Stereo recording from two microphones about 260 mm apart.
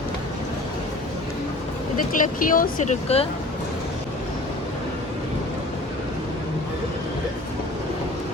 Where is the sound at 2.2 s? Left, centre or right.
Left.